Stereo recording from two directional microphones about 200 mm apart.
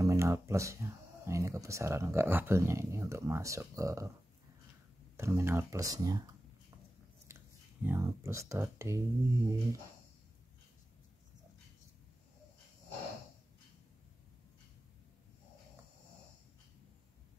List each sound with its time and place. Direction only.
0.0 s speech: 15° right (ahead or behind)
5.1 s speech: 15° right (ahead or behind)